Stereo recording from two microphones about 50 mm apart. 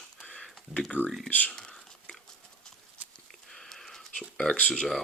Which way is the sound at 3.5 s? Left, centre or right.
Centre.